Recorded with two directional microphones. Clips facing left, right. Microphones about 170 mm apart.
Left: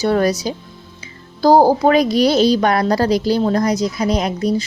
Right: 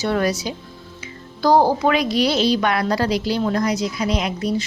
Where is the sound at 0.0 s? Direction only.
40° left (ahead or behind).